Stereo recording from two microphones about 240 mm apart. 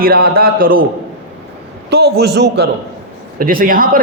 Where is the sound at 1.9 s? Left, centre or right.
Right.